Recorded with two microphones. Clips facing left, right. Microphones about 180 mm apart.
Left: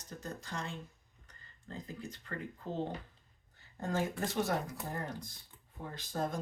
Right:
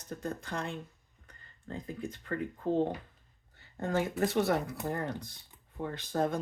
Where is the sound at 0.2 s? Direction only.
55° right (ahead or behind).